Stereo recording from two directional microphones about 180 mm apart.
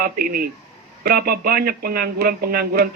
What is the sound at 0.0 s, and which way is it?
Speech, 55° right (ahead or behind).